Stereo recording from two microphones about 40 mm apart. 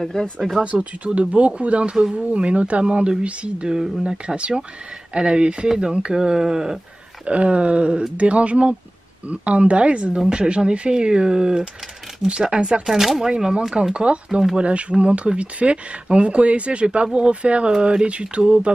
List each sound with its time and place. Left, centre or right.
0.0 s speech: centre
0.7 s speech: right
3.6 s speech: centre
7.2 s speech: right
10.1 s speech: centre
12.8 s speech: centre
13.2 s speech: centre